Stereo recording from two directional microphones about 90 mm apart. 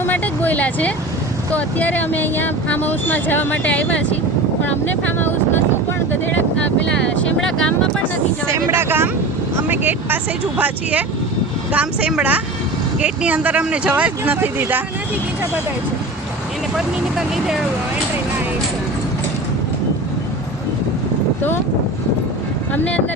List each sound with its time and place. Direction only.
0.0 s a sound: 20° left (ahead or behind)
1.5 s speech: 15° left (ahead or behind)
8.7 s speech: 25° right (ahead or behind)
16.7 s speech: 5° right (ahead or behind)
22.7 s speech: 15° left (ahead or behind)